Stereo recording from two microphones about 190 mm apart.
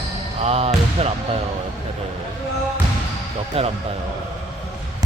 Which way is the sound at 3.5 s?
30° right (ahead or behind).